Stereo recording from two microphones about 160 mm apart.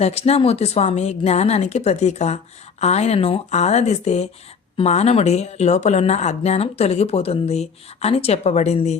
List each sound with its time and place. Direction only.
0.0 s speech: 40° left (ahead or behind)